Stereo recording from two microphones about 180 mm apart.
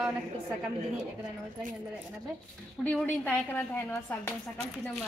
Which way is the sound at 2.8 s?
10° left (ahead or behind).